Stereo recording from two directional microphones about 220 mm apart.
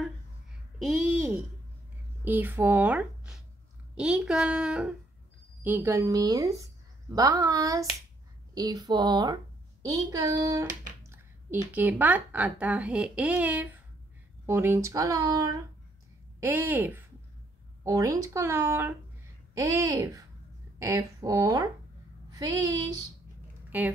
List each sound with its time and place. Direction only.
0.8 s a sound: 5° right (ahead or behind)
2.2 s a woman's voice: 10° right (ahead or behind)
11.7 s a woman's voice: 10° right (ahead or behind)